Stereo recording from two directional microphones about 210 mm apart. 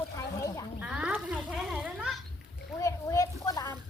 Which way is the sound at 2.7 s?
15° left (ahead or behind).